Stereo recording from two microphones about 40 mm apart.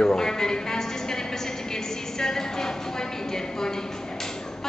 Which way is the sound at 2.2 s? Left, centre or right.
Centre.